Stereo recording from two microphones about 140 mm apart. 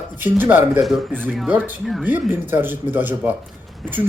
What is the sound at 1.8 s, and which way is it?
Speech, centre (ahead or behind).